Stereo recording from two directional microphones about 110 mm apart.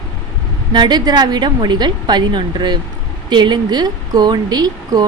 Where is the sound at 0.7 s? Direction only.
40° right (ahead or behind).